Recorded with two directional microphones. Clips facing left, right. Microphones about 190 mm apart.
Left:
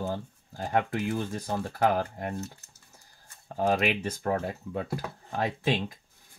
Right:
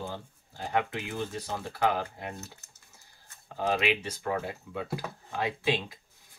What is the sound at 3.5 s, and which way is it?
Speech, 45° left (ahead or behind).